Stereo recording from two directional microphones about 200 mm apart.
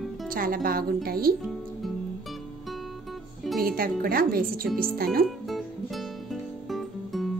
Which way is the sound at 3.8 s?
45° right (ahead or behind).